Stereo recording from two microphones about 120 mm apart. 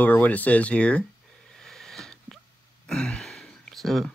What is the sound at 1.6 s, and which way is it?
Wheeze, 5° left (ahead or behind).